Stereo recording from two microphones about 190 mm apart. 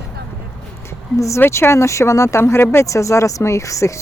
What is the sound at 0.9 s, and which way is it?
Speech, 15° left (ahead or behind).